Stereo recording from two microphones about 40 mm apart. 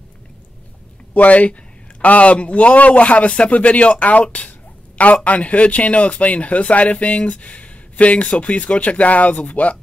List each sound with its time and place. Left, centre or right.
1.1 s a man's voice: left